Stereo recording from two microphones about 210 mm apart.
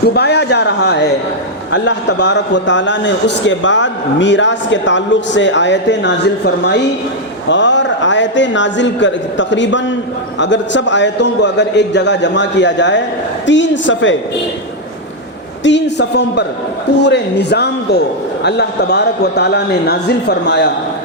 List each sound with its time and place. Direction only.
0.0 s a man's voice: 50° left (ahead or behind)
15.6 s a man's voice: 55° left (ahead or behind)